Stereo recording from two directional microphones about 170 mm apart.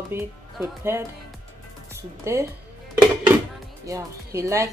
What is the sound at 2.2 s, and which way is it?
Speech, 15° right (ahead or behind).